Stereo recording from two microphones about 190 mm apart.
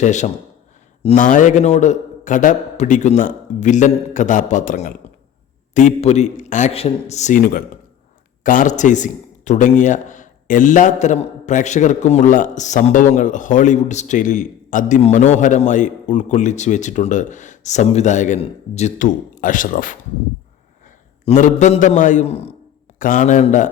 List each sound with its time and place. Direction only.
0.0 s a man's voice: 40° left (ahead or behind)